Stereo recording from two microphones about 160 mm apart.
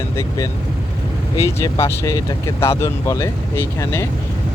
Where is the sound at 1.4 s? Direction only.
20° left (ahead or behind).